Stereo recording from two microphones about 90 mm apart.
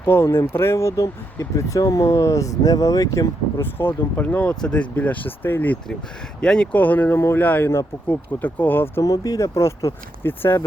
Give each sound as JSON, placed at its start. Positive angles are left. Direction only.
{"t": 0.0, "sound": "speech", "side_deg": 30}
{"t": 3.6, "sound": "speech", "side_deg": 25}
{"t": 9.0, "sound": "speech", "side_deg": 40}